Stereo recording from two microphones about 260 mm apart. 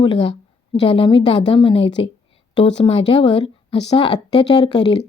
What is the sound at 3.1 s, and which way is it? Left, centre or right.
A woman's voice, centre.